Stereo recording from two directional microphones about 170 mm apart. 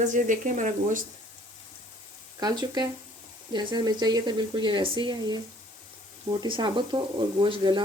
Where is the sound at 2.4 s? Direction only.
25° right (ahead or behind).